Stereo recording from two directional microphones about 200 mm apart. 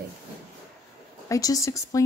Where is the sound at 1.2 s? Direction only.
15° left (ahead or behind).